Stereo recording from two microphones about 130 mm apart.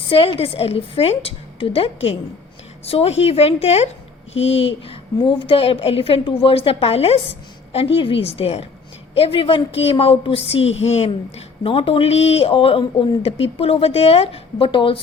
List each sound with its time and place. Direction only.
0.0 s a woman's voice: 45° left (ahead or behind)